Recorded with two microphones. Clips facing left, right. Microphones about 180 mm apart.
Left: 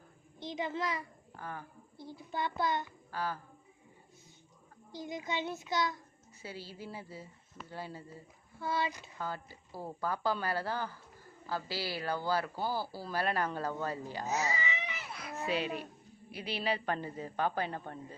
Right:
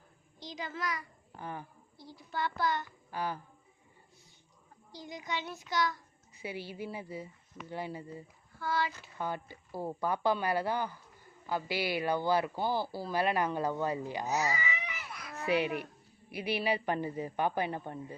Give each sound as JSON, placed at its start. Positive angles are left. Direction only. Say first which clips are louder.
{"t": 0.4, "sound": "a child's voice", "louder": "left 3 dB", "side_deg": 25}
{"t": 1.4, "sound": "speech", "louder": "right 2 dB", "side_deg": -15}
{"t": 2.3, "sound": "a child's voice", "louder": "right 1 dB", "side_deg": 20}
{"t": 3.1, "sound": "speech", "louder": "right 2 dB", "side_deg": -15}
{"t": 4.9, "sound": "a child's voice", "louder": "left 2 dB", "side_deg": 20}
{"t": 6.4, "sound": "speech", "louder": "right 5 dB", "side_deg": -15}
{"t": 8.5, "sound": "a child's voice", "louder": "right 1 dB", "side_deg": 25}
{"t": 9.1, "sound": "speech", "louder": "right 3 dB", "side_deg": -20}
{"t": 14.3, "sound": "baby cry", "louder": "right 1 dB", "side_deg": 25}
{"t": 15.4, "sound": "speech", "louder": "right 5 dB", "side_deg": -15}